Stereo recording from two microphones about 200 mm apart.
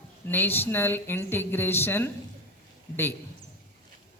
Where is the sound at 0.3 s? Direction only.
10° left (ahead or behind).